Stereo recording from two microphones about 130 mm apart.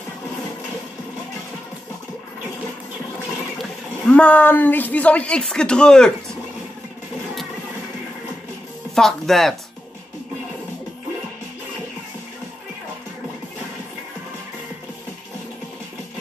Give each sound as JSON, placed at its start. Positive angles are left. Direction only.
{"t": 3.5, "sound": "speech", "side_deg": 5}
{"t": 8.9, "sound": "speech", "side_deg": 5}